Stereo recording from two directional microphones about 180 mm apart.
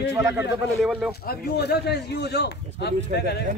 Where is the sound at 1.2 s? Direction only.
60° left (ahead or behind).